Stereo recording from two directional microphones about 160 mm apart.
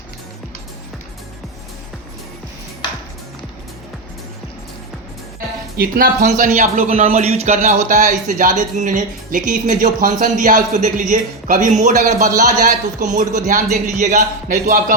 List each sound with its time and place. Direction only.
5.7 s speech: 65° right (ahead or behind)